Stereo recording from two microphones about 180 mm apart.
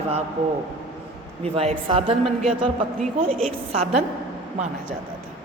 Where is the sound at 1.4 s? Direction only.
35° right (ahead or behind).